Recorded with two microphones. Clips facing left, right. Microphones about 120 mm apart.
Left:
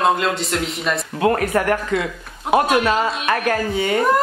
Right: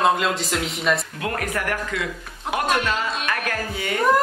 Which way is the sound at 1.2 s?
35° left (ahead or behind).